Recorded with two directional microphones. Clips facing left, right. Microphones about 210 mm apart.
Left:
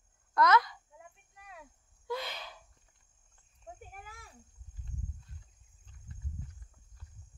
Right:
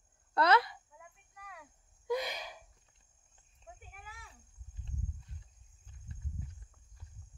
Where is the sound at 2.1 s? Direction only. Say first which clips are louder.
Right 3 dB; 15° right (ahead or behind).